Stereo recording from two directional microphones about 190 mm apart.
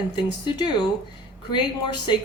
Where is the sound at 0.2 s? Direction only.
25° left (ahead or behind).